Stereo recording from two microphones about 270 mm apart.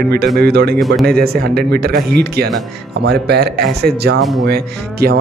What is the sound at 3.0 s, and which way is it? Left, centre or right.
Speech, right.